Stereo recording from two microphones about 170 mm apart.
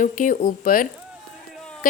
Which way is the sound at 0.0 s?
50° left (ahead or behind).